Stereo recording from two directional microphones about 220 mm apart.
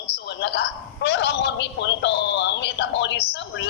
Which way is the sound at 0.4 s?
50° left (ahead or behind).